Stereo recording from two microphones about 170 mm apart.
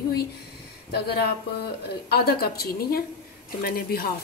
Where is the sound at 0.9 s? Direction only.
70° left (ahead or behind).